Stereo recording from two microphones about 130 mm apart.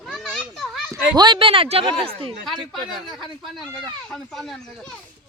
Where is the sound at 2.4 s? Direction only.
Centre (ahead or behind).